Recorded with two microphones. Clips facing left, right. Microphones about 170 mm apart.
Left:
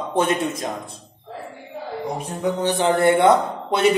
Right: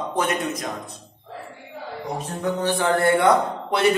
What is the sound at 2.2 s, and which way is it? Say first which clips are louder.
A man's voice: left 1 dB; 10° left (ahead or behind).